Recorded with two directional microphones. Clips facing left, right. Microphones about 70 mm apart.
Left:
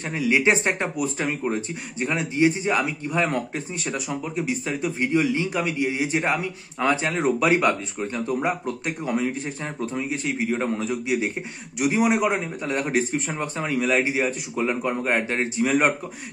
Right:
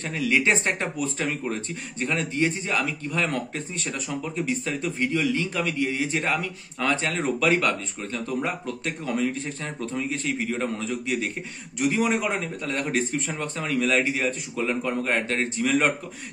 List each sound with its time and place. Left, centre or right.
0.1 s a man's voice: centre
4.9 s a man's voice: left